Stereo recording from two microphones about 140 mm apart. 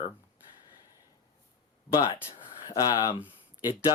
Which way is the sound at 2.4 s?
30° left (ahead or behind).